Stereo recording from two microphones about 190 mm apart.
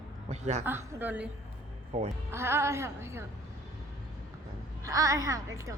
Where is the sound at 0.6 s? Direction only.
10° right (ahead or behind).